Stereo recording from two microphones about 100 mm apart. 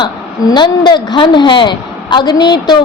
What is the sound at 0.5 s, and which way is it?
A woman's voice, 50° left (ahead or behind).